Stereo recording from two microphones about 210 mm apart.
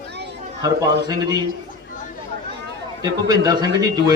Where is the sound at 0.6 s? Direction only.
15° right (ahead or behind).